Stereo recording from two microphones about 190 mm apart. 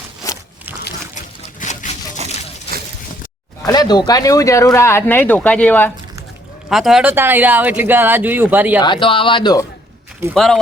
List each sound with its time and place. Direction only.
1.5 s a sound: 40° left (ahead or behind)
3.7 s speech: 20° left (ahead or behind); by 8.8 s 10° right (ahead or behind)
8.8 s speech: 25° left (ahead or behind)
10.3 s speech: centre (ahead or behind)